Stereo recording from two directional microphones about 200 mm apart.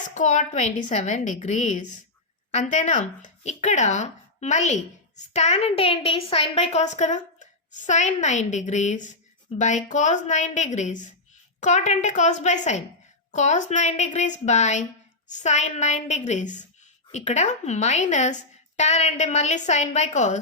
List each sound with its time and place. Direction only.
0.0 s speech: 40° left (ahead or behind)